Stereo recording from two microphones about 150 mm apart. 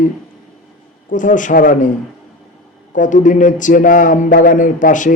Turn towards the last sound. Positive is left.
turn(degrees=60)  # may be behind; listen again after turning